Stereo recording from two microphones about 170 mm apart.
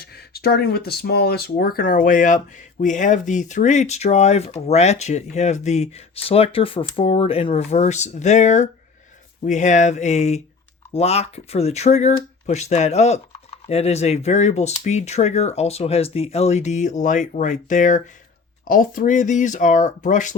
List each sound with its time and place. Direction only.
0.0 s speech: 65° left (ahead or behind); by 20.3 s 50° left (ahead or behind)